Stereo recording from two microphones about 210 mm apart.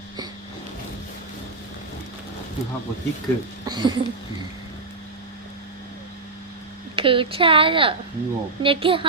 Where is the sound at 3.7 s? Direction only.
20° right (ahead or behind).